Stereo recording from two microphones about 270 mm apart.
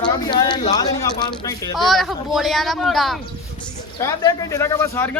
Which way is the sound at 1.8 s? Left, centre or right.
Centre.